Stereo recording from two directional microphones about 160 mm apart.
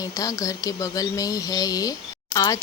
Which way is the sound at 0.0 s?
20° left (ahead or behind).